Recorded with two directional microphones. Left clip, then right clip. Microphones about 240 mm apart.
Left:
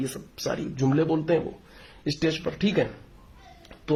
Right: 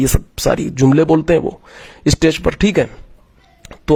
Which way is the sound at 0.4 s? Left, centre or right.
Right.